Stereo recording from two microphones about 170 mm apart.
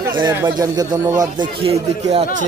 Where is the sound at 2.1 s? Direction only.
40° right (ahead or behind).